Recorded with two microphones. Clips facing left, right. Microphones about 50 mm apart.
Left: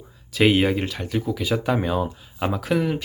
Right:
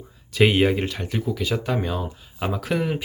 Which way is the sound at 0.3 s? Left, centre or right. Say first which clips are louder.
Even; centre.